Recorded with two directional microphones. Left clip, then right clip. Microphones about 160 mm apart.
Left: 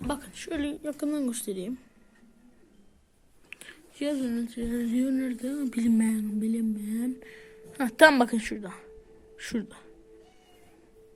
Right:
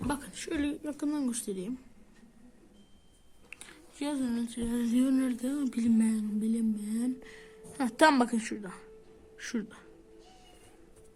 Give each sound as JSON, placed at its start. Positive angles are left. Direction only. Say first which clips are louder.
{"t": 0.1, "sound": "a woman's voice", "louder": "left 3 dB", "side_deg": 10}
{"t": 3.5, "sound": "a sound", "louder": "left 3 dB", "side_deg": 10}
{"t": 5.2, "sound": "speech", "louder": "even", "side_deg": -5}
{"t": 5.9, "sound": "a woman's voice", "louder": "left 2 dB", "side_deg": 20}
{"t": 6.2, "sound": "a woman's voice", "louder": "left 2 dB", "side_deg": 10}